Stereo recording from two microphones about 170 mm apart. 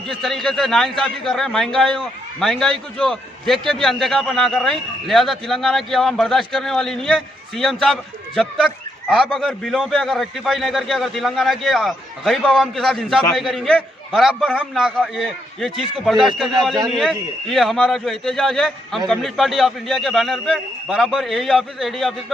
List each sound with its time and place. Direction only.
0.1 s a man's voice: centre (ahead or behind)